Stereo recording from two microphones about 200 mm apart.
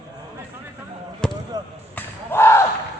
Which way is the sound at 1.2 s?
5° left (ahead or behind).